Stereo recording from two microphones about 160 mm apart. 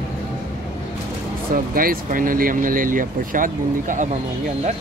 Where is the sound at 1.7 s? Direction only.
60° right (ahead or behind).